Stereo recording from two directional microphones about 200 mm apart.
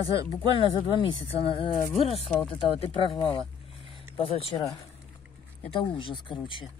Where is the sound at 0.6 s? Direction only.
25° left (ahead or behind).